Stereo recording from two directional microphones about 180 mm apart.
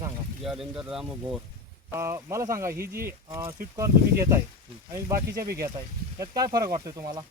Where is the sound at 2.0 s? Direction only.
15° right (ahead or behind).